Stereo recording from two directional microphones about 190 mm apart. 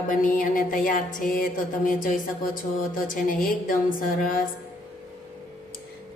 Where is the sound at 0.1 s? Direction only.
45° left (ahead or behind).